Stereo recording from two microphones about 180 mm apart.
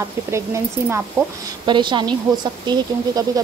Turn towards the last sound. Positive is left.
turn(degrees=-25)  # may be behind; listen again after turning